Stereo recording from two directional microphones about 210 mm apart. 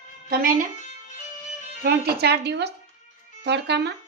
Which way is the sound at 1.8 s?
50° right (ahead or behind).